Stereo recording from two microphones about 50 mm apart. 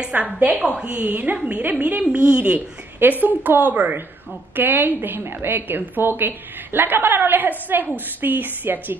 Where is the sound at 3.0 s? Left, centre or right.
Right.